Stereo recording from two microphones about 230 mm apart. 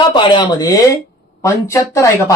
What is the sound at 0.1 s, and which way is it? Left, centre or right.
Speech, centre.